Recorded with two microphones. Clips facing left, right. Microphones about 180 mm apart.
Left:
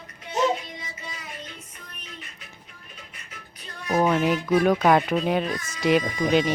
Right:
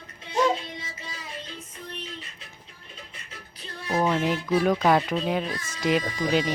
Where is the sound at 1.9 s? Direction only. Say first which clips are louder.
Right 6 dB; 30° right (ahead or behind).